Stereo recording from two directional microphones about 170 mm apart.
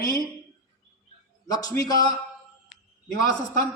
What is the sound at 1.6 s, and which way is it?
Speech, 20° left (ahead or behind).